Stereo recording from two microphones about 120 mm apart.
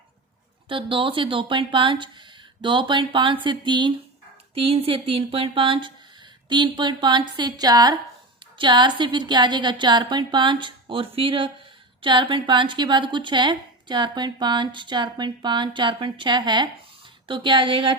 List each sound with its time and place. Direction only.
0.7 s a woman's voice: 45° right (ahead or behind)
4.5 s a woman's voice: 50° right (ahead or behind)